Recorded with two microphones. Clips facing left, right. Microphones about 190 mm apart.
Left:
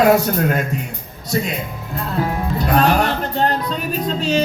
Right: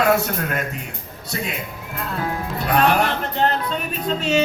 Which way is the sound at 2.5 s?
35° left (ahead or behind).